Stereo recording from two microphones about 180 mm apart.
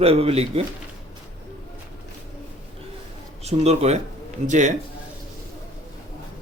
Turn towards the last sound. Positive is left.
turn(degrees=-45)  # may be behind; listen again after turning